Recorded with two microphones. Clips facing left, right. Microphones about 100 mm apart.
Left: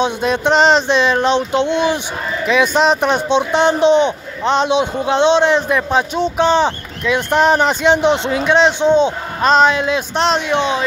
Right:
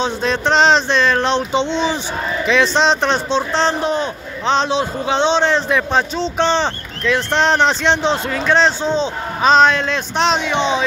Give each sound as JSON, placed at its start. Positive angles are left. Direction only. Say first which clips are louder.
{"t": 0.0, "sound": "a man's voice", "louder": "left 2 dB", "side_deg": 10}
{"t": 4.5, "sound": "a man's voice", "louder": "left 2 dB", "side_deg": 10}
{"t": 9.4, "sound": "a man's voice", "louder": "even", "side_deg": 5}